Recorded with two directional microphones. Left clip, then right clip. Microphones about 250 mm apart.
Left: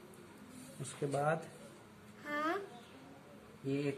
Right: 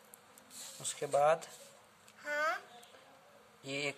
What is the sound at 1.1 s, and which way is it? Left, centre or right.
Speech, right.